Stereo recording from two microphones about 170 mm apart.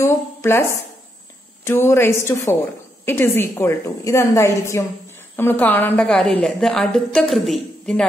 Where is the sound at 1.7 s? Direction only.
15° left (ahead or behind).